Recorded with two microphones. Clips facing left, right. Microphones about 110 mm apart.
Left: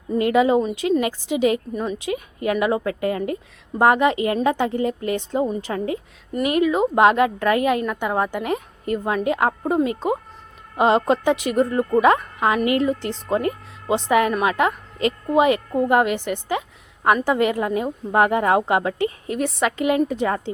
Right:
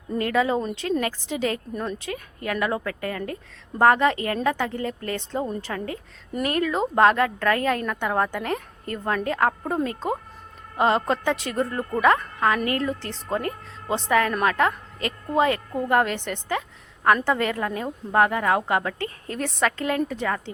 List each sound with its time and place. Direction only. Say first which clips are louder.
0.2 s speech: left 6 dB; 15° left (ahead or behind)